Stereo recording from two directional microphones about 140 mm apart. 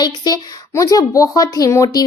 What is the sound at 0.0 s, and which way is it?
A woman's voice, 30° left (ahead or behind).